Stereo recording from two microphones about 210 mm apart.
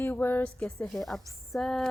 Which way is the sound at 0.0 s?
10° left (ahead or behind).